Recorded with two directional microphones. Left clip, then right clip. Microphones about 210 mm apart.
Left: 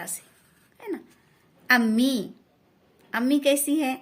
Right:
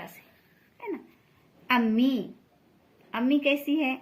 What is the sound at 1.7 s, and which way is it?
A woman's voice, 55° left (ahead or behind).